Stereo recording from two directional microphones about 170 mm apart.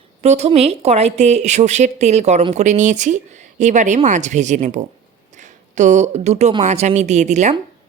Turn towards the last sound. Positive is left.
turn(degrees=-45)  # may be behind; listen again after turning